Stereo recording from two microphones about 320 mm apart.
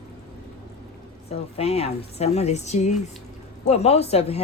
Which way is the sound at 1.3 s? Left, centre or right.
Centre.